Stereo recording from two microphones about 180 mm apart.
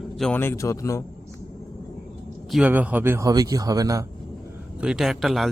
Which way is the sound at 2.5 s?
5° right (ahead or behind).